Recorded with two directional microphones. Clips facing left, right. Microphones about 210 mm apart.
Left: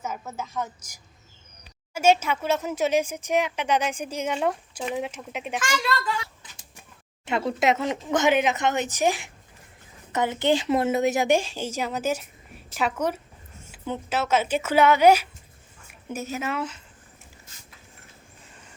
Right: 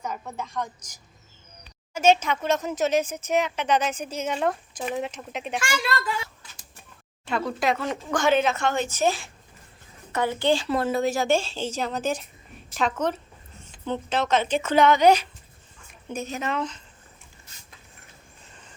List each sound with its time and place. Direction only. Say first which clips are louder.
0.0 s a woman's voice: even; 5° left (ahead or behind)
5.5 s a woman's voice: left 1 dB; 10° right (ahead or behind)
6.4 s a sound: even; 20° left (ahead or behind)
7.3 s a woman's voice: left 2 dB; 20° left (ahead or behind)